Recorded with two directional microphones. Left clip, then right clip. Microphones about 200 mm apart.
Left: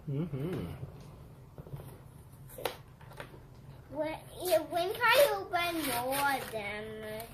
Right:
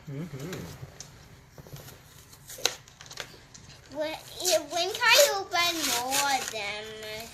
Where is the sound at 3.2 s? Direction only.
Centre (ahead or behind).